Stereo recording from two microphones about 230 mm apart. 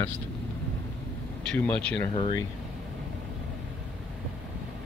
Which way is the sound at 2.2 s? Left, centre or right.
Left.